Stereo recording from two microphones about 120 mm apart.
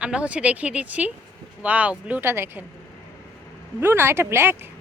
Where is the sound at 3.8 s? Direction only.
20° right (ahead or behind).